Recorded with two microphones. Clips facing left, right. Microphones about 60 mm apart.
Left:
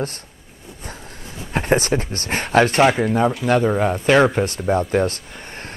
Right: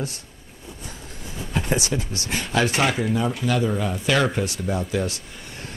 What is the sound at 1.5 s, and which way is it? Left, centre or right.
Speech, left.